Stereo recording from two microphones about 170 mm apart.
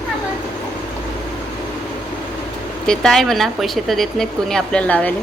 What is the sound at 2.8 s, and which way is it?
A woman's voice, 5° left (ahead or behind).